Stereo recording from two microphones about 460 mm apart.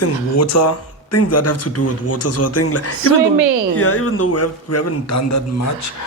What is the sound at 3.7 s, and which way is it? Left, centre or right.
Speech, left.